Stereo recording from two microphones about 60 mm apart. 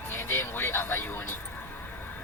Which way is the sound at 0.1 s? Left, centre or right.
Left.